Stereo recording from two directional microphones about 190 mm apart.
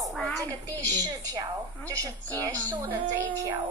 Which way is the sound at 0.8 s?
20° right (ahead or behind).